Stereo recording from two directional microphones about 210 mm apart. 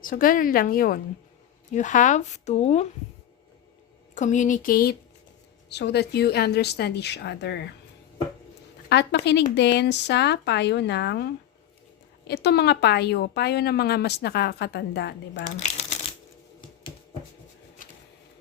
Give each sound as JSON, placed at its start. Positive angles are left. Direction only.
{"t": 0.0, "sound": "speech", "side_deg": 40}
{"t": 4.1, "sound": "a woman's voice", "side_deg": 35}
{"t": 8.9, "sound": "a woman's voice", "side_deg": 55}
{"t": 12.3, "sound": "a woman's voice", "side_deg": 50}
{"t": 15.5, "sound": "shuffling cards", "side_deg": 30}